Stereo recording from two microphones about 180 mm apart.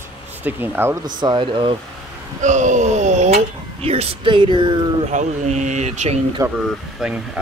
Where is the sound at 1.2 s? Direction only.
25° right (ahead or behind).